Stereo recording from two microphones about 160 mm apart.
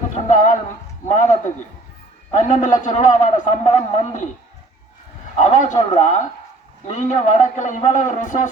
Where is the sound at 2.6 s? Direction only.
50° left (ahead or behind).